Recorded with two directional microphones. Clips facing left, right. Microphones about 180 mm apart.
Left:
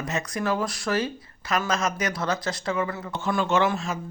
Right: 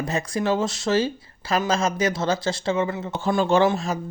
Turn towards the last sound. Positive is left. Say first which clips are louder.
# right 4 dB
turn(degrees=-35)  # may be behind; listen again after turning